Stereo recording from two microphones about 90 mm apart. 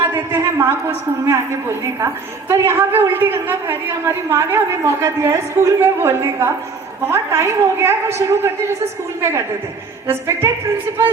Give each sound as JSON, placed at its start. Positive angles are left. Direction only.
{"t": 0.0, "sound": "a sound", "side_deg": -25}
{"t": 2.5, "sound": "a woman's voice", "side_deg": -30}
{"t": 10.1, "sound": "a woman's voice", "side_deg": -25}